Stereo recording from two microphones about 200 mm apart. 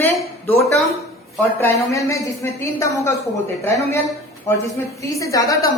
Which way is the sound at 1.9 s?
15° left (ahead or behind).